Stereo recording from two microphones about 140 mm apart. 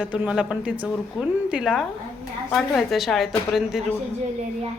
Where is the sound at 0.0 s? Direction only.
10° right (ahead or behind).